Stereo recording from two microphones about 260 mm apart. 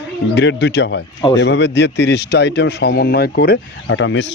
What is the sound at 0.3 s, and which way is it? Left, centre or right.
A man's voice, left.